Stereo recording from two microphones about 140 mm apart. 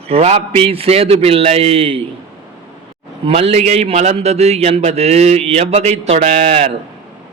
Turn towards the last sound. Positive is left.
turn(degrees=-50)  # may be behind; listen again after turning